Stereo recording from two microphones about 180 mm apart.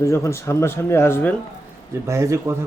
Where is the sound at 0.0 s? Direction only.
15° left (ahead or behind).